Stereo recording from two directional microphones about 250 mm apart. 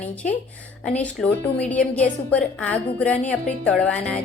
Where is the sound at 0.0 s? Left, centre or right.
Centre.